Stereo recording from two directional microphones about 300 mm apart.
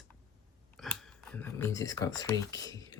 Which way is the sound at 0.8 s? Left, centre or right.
Centre.